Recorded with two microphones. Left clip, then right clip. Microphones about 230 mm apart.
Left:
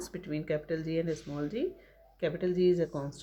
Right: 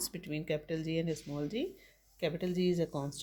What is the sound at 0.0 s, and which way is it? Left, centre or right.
Speech, right.